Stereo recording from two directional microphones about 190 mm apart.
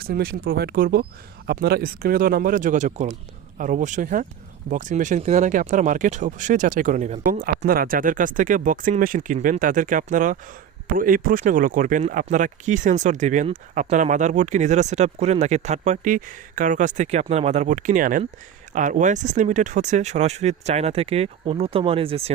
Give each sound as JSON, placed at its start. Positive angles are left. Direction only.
{"t": 0.0, "sound": "speech", "side_deg": -55}